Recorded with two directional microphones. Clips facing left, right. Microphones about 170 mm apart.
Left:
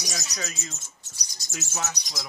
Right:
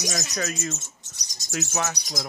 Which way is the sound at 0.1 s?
55° right (ahead or behind).